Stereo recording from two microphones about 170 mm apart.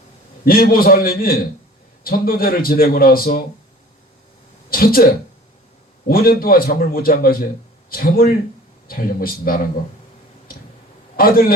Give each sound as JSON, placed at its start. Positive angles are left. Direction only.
{"t": 0.4, "sound": "speech", "side_deg": 60}
{"t": 4.7, "sound": "speech", "side_deg": 60}
{"t": 11.2, "sound": "speech", "side_deg": 60}